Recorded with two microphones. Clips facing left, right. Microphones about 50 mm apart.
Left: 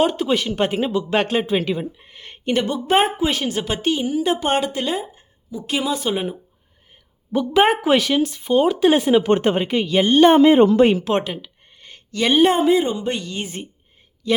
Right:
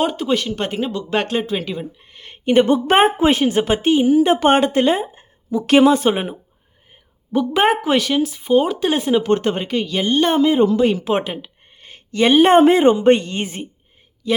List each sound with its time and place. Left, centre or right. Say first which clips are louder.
0.0 s speech: even; centre
2.9 s a woman's voice: right 2 dB; right
4.4 s a woman's voice: right 7 dB; right
5.5 s a woman's voice: right 11 dB; right
5.9 s a woman's voice: right 5 dB; right
7.3 s speech: even; centre
9.3 s speech: left 1 dB; centre
10.0 s speech: left 5 dB; left
10.5 s a woman's voice: left 3 dB; left
11.0 s a sound: right 1 dB; centre
12.5 s a woman's voice: right 6 dB; right
14.2 s a man's voice: even; centre